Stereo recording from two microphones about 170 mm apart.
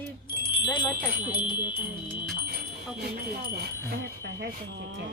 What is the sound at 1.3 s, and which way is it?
Speech, 25° left (ahead or behind).